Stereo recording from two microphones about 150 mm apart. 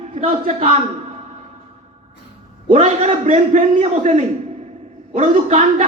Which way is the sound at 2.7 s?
55° right (ahead or behind).